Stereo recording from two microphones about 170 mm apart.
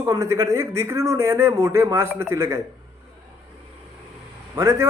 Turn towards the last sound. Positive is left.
turn(degrees=-15)  # may be behind; listen again after turning